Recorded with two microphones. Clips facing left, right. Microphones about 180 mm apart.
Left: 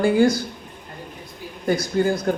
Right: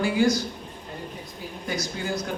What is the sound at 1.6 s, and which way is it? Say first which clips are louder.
Speech: left 10 dB; 55° left (ahead or behind).